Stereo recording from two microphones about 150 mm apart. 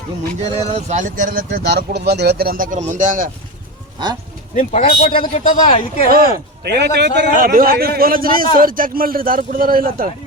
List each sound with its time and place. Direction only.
0.7 s speech: 50° right (ahead or behind)
4.5 s speech: 60° left (ahead or behind)
5.3 s speech: 50° left (ahead or behind)
6.1 s a man's voice: 80° right
6.7 s a man's voice: 90° right; by 10.1 s 70° right (ahead or behind)